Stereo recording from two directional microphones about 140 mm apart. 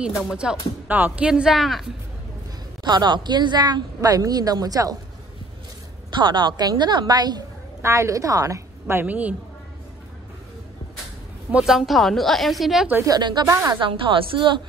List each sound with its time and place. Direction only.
0.2 s speech: 5° right (ahead or behind)
2.8 s speech: 30° right (ahead or behind)
6.0 s a woman's voice: 35° right (ahead or behind); by 9.3 s 10° right (ahead or behind)
11.5 s speech: 5° right (ahead or behind)
12.9 s speech: 25° right (ahead or behind)
13.7 s a woman's voice: 40° right (ahead or behind)